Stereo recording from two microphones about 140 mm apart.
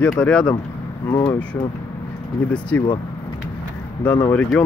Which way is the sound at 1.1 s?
25° left (ahead or behind).